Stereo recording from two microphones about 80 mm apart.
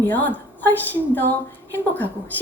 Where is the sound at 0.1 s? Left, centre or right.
Left.